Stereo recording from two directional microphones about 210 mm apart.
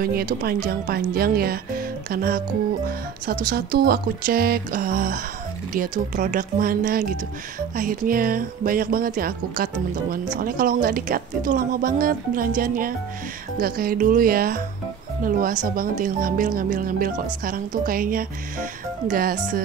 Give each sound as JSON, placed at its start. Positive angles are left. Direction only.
{"t": 0.0, "sound": "speech", "side_deg": -45}
{"t": 3.4, "sound": "speech", "side_deg": -45}